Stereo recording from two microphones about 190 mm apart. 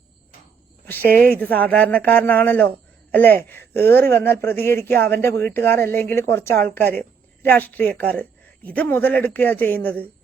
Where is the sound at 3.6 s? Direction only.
55° right (ahead or behind).